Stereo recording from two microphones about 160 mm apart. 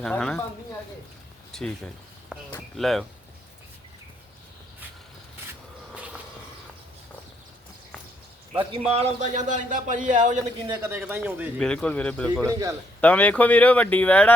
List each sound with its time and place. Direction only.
0.0 s speech: 5° left (ahead or behind)
1.5 s speech: 5° left (ahead or behind)
8.9 s a man's voice: 45° right (ahead or behind)
10.8 s speech: 15° right (ahead or behind)
11.6 s speech: 5° left (ahead or behind)
12.5 s a man's voice: 20° right (ahead or behind)
13.0 s speech: 10° left (ahead or behind)